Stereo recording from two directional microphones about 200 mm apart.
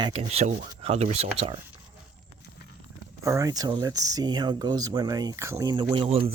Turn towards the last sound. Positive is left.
turn(degrees=-25)  # may be behind; listen again after turning